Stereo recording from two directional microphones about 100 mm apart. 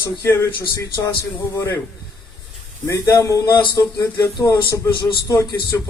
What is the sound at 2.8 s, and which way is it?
Speech, 30° left (ahead or behind).